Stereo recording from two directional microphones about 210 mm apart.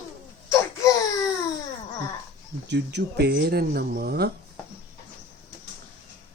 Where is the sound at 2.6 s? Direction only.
55° right (ahead or behind).